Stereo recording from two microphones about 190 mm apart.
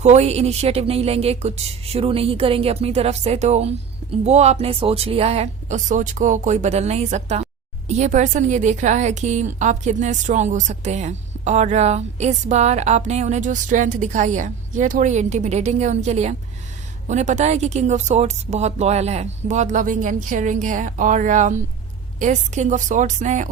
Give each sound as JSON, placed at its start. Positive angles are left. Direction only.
{"t": 0.0, "sound": "a woman's voice", "side_deg": -35}